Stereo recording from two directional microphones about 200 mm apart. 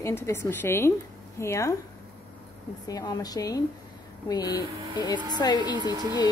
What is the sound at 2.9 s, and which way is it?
A woman's voice, 20° left (ahead or behind).